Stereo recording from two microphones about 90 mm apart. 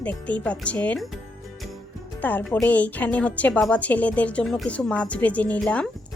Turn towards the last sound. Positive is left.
turn(degrees=10)  # may be behind; listen again after turning